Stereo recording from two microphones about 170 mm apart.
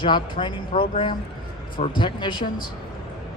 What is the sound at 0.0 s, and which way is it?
A man's voice, 30° left (ahead or behind).